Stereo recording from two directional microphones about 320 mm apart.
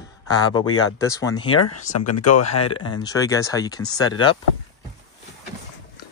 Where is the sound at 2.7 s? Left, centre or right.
Centre.